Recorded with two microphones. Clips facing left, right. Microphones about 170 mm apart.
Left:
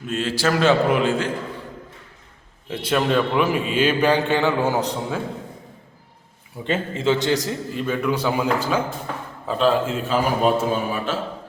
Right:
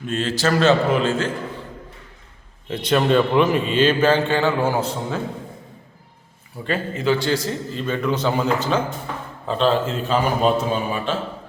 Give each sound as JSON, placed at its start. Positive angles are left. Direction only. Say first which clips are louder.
{"t": 0.1, "sound": "a man's voice", "louder": "right 1 dB", "side_deg": 10}
{"t": 2.6, "sound": "a man's voice", "louder": "right 3 dB", "side_deg": 5}
{"t": 6.7, "sound": "a man's voice", "louder": "even", "side_deg": 25}